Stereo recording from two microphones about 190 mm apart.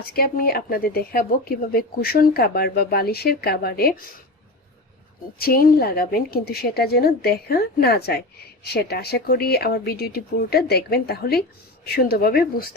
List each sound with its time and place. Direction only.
0.1 s a woman's voice: 50° left (ahead or behind)
5.4 s a woman's voice: 50° left (ahead or behind)